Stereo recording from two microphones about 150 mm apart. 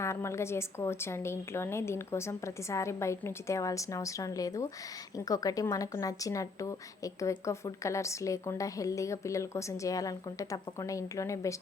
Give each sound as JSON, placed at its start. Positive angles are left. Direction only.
{"t": 0.0, "sound": "speech", "side_deg": 20}